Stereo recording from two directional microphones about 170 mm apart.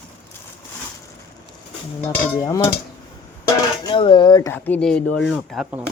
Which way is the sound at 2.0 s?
20° left (ahead or behind).